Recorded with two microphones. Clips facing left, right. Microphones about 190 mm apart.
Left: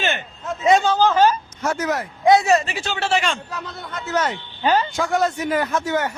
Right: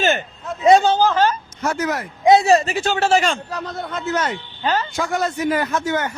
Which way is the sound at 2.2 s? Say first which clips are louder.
Right 2 dB; 25° right (ahead or behind).